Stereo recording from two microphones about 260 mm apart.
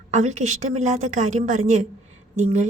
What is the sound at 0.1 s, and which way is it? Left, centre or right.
A woman's voice, right.